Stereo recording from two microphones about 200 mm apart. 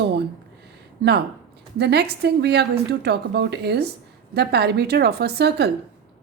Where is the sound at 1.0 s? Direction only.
60° right (ahead or behind).